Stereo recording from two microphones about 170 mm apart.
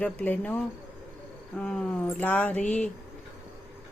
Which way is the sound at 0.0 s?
10° left (ahead or behind).